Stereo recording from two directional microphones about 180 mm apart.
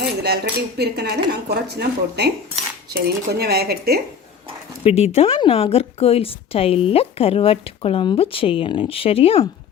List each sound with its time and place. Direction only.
0.0 s cutlery: 65° right (ahead or behind)
0.8 s speech: 65° right (ahead or behind)
4.8 s a woman's voice: 35° left (ahead or behind)